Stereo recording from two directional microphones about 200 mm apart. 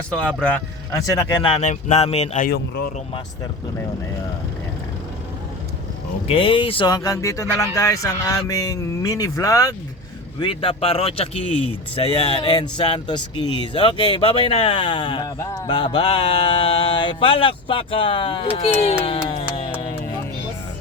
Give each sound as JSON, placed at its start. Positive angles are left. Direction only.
{"t": 0.1, "sound": "speech", "side_deg": 5}
{"t": 1.0, "sound": "speech", "side_deg": 15}
{"t": 1.4, "sound": "speech", "side_deg": 30}
{"t": 2.5, "sound": "speech", "side_deg": 55}
{"t": 6.2, "sound": "speech", "side_deg": 25}